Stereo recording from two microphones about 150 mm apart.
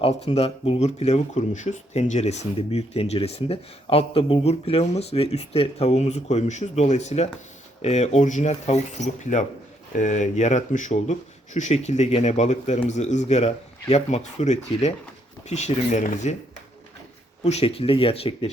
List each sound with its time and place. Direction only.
0.0 s speech: 40° left (ahead or behind)
17.4 s speech: 45° left (ahead or behind)